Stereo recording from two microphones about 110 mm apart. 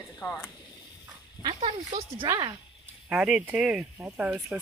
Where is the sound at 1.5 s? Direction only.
75° right (ahead or behind).